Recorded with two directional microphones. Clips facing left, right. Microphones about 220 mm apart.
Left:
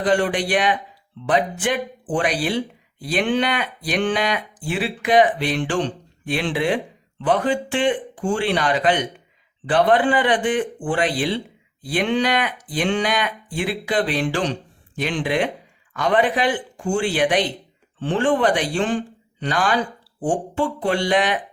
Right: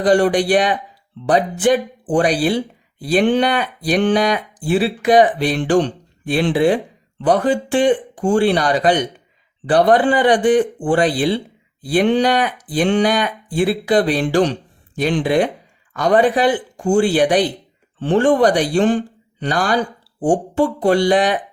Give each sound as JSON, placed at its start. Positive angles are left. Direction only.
{"t": 0.0, "sound": "speech", "side_deg": -40}